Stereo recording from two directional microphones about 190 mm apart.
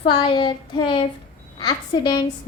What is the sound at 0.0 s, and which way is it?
A woman's voice, 25° left (ahead or behind).